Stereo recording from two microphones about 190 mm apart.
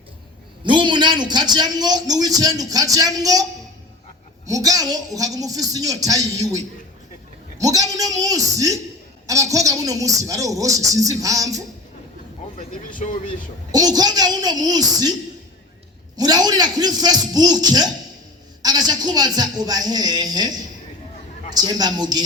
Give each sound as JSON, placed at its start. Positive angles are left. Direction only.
{"t": 0.6, "sound": "a man's voice", "side_deg": -25}
{"t": 4.4, "sound": "a man's voice", "side_deg": -20}
{"t": 12.5, "sound": "speech", "side_deg": 45}
{"t": 13.7, "sound": "a man's voice", "side_deg": -20}
{"t": 16.1, "sound": "a man's voice", "side_deg": -20}
{"t": 21.5, "sound": "a man's voice", "side_deg": -20}